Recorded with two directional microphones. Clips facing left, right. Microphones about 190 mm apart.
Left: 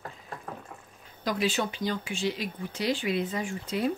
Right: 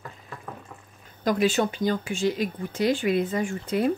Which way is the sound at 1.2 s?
50° right (ahead or behind).